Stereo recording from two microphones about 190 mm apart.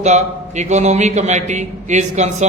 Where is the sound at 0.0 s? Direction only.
35° right (ahead or behind).